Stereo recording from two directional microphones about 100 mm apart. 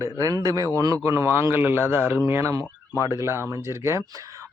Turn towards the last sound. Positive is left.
turn(degrees=-30)  # may be behind; listen again after turning